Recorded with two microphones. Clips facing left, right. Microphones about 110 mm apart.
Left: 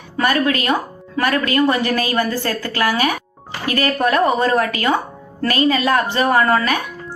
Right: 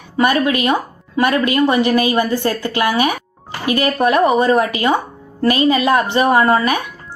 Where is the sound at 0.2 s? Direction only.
20° right (ahead or behind).